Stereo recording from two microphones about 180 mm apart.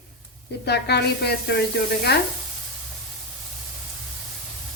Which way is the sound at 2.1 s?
65° left (ahead or behind).